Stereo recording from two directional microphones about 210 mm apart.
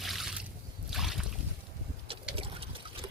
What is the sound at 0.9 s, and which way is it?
Boat, centre (ahead or behind).